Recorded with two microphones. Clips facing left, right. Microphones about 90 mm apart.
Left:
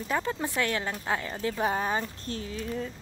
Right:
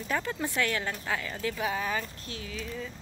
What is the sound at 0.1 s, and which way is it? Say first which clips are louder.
Speech: left 2 dB; 20° left (ahead or behind).